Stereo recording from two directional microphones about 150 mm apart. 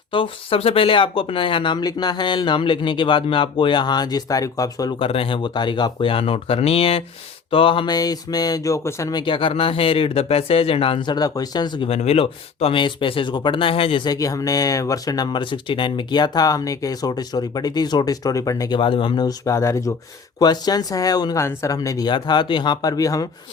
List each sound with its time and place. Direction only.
0.1 s speech: 35° left (ahead or behind)
4.9 s speech: 40° left (ahead or behind)
11.9 s speech: 45° left (ahead or behind); by 18.8 s 25° left (ahead or behind)
18.8 s speech: 35° left (ahead or behind)